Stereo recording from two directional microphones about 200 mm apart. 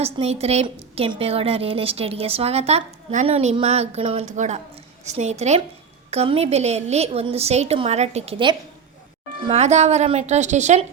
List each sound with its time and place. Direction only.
0.0 s a woman's voice: 30° right (ahead or behind)